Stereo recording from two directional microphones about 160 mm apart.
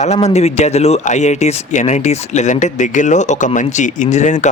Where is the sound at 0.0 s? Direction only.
45° left (ahead or behind).